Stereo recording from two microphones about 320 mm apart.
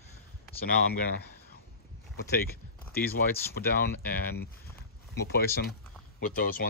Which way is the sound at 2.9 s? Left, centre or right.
Left.